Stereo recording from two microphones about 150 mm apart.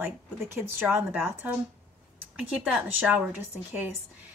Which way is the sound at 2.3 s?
10° right (ahead or behind).